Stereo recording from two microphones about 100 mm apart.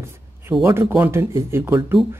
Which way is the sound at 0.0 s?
25° right (ahead or behind).